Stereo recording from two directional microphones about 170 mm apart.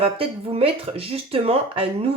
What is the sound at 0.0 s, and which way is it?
Speech, 35° right (ahead or behind).